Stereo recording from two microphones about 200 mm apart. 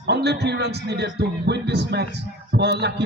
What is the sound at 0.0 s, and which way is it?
A man's voice, 55° right (ahead or behind).